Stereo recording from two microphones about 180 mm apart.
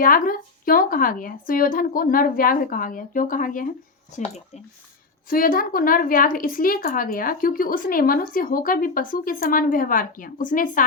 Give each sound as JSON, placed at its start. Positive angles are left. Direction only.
{"t": 0.0, "sound": "a woman's voice", "side_deg": 50}
{"t": 5.3, "sound": "a woman's voice", "side_deg": 50}